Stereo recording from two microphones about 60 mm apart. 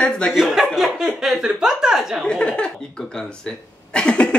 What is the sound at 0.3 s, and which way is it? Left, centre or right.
Speech, centre.